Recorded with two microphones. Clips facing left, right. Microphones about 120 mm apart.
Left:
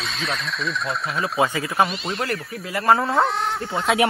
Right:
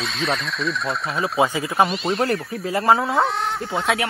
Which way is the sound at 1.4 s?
25° right (ahead or behind).